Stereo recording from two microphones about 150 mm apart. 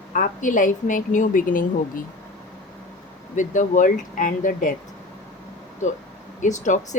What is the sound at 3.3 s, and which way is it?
A woman's voice, 55° left (ahead or behind).